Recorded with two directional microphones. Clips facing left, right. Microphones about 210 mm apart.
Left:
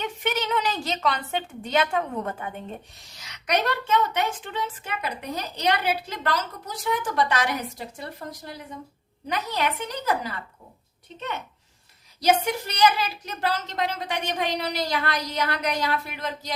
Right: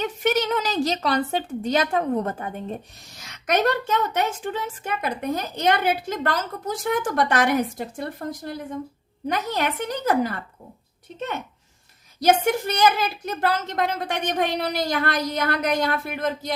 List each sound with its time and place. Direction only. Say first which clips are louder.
0.0 s a woman's voice: right 5 dB; 40° right (ahead or behind)
12.2 s a woman's voice: right 3 dB; 50° right (ahead or behind)